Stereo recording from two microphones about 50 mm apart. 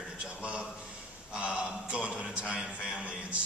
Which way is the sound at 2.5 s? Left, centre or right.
Centre.